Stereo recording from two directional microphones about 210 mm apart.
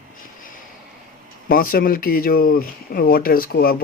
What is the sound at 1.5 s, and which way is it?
Speech, 45° left (ahead or behind).